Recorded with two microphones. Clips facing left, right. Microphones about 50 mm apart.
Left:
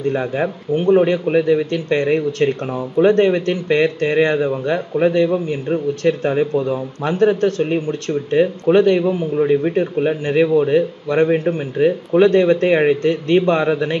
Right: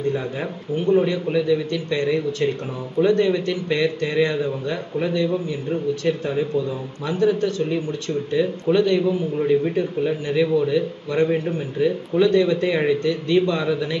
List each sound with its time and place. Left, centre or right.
0.1 s a man's voice: left